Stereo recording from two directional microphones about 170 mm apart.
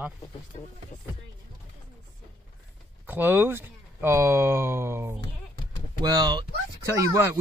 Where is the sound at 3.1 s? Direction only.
10° right (ahead or behind).